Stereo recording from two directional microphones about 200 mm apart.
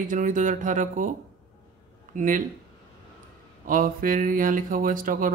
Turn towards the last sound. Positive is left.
turn(degrees=-45)  # may be behind; listen again after turning